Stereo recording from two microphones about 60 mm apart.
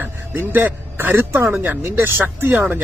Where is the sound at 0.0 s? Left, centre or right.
Right.